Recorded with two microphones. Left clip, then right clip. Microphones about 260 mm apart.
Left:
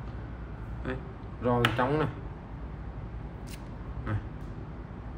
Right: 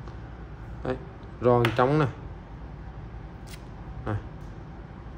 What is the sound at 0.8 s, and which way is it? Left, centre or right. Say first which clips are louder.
Speech: right 6 dB; centre.